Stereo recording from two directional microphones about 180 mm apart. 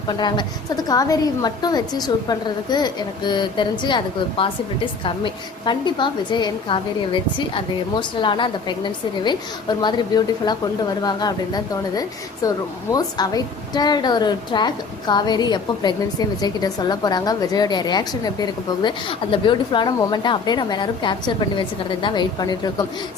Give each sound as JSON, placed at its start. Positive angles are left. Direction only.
{"t": 0.1, "sound": "a woman's voice", "side_deg": 25}